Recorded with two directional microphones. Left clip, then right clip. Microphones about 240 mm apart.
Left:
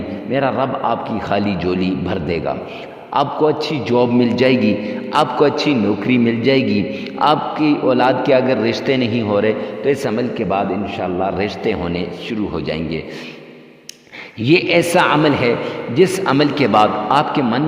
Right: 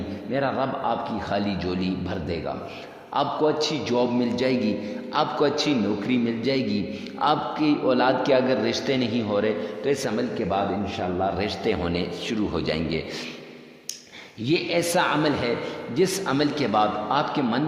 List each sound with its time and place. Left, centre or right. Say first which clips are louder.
0.3 s a man's voice: left 7 dB; left; by 13.0 s centre
14.4 s a man's voice: left 10 dB; left